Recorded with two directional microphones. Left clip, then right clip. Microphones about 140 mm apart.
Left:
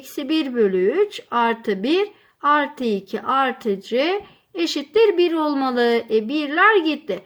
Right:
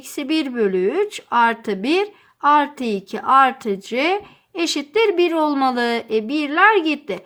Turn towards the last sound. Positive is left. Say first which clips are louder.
# even
turn(degrees=-35)  # may be behind; listen again after turning